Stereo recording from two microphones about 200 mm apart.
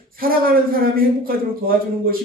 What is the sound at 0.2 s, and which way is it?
A man's voice, 45° right (ahead or behind).